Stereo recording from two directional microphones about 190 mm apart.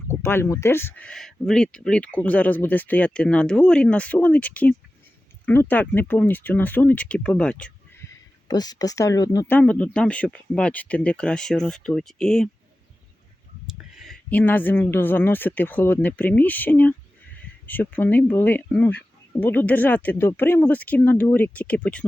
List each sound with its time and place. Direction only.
0.1 s speech: 10° left (ahead or behind)
8.4 s speech: 20° left (ahead or behind)
9.6 s speech: 10° left (ahead or behind)
13.9 s speech: centre (ahead or behind)